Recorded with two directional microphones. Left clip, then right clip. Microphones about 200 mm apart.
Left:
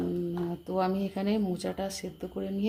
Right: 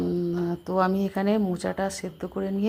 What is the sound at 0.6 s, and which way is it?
Speech, 20° right (ahead or behind).